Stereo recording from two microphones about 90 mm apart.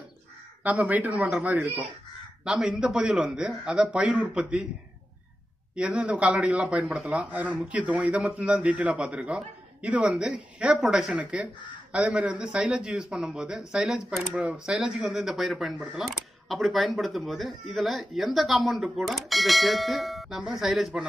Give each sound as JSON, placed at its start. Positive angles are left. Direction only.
{"t": 0.7, "sound": "a man's voice", "side_deg": -15}
{"t": 5.8, "sound": "a man's voice", "side_deg": -15}